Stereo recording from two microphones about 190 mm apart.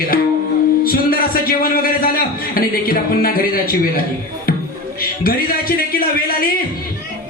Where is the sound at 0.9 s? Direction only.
50° left (ahead or behind).